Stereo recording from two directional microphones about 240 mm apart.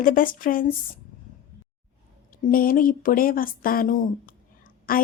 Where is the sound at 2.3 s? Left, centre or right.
Left.